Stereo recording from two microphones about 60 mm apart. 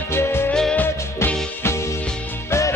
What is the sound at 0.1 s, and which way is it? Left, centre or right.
Music, left.